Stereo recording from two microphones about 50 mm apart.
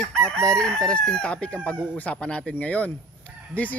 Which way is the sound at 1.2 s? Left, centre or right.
Left.